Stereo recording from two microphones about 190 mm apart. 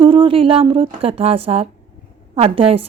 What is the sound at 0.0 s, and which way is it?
A woman's voice, 30° right (ahead or behind).